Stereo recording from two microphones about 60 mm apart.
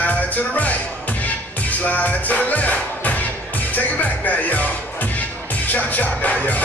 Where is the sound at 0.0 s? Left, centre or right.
Left.